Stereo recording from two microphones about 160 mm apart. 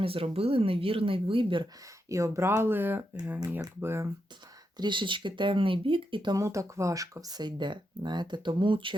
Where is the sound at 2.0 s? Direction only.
20° right (ahead or behind).